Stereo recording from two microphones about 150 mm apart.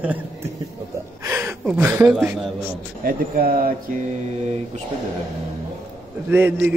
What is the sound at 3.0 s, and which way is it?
Speech, 75° right (ahead or behind).